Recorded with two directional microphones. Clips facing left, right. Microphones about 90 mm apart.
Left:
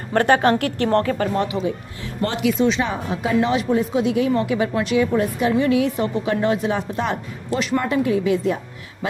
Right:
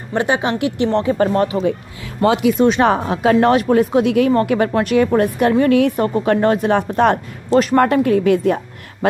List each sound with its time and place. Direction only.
0.1 s speech: 10° right (ahead or behind)
1.1 s speech: 40° right (ahead or behind)
2.4 s a woman's voice: 55° right (ahead or behind)